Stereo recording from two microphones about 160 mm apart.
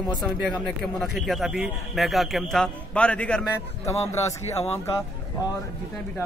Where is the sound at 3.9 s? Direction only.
20° left (ahead or behind).